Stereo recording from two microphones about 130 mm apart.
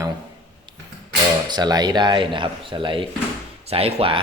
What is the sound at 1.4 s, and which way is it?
A man's voice, 30° right (ahead or behind).